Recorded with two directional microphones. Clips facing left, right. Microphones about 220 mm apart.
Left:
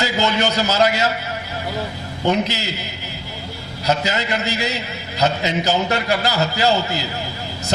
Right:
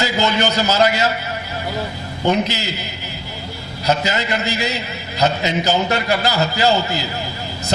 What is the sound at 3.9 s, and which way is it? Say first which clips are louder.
A man's voice: right 1 dB; 15° right (ahead or behind).